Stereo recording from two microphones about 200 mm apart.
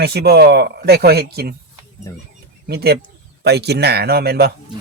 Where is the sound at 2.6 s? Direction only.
50° right (ahead or behind).